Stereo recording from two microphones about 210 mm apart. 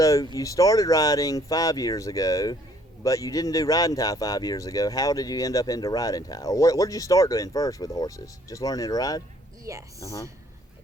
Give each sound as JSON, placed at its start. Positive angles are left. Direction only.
{"t": 0.0, "sound": "speech", "side_deg": 15}
{"t": 9.7, "sound": "speech", "side_deg": -15}
{"t": 10.0, "sound": "speech", "side_deg": 15}